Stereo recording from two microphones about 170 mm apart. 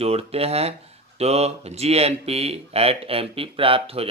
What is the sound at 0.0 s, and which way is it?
Speech, 35° right (ahead or behind).